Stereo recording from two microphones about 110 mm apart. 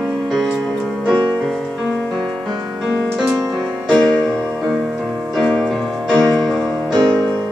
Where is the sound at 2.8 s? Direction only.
10° right (ahead or behind).